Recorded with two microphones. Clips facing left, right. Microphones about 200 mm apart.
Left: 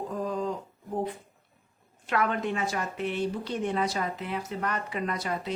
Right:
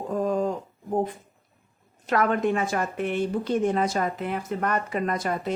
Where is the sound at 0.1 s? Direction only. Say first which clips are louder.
Right 8 dB; 50° right (ahead or behind).